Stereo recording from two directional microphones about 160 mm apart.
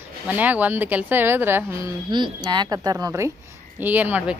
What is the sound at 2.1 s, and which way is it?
A woman's voice, 30° right (ahead or behind).